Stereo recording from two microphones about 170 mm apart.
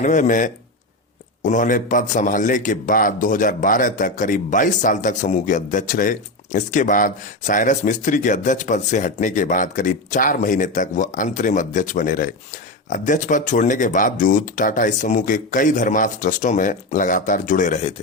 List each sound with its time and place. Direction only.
0.0 s a man's voice: 45° left (ahead or behind)